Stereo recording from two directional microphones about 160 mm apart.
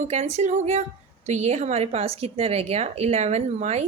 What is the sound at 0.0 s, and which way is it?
A woman's voice, 45° right (ahead or behind).